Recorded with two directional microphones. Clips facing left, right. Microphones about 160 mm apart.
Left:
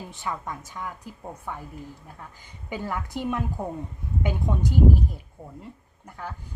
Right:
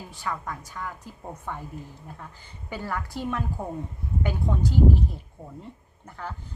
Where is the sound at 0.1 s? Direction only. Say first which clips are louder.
Right 1 dB; 20° left (ahead or behind).